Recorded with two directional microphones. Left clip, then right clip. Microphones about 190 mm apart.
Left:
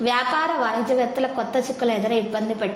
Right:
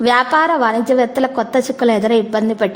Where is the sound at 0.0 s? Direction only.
40° right (ahead or behind).